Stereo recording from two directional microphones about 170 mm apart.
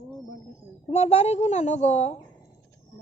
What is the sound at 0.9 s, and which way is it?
A woman's voice, 40° left (ahead or behind).